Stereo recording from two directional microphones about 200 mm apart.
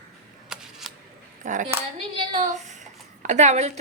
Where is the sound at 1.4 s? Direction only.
40° right (ahead or behind).